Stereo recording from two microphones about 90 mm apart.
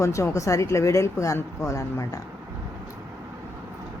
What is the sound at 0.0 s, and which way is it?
A woman's voice, 35° left (ahead or behind).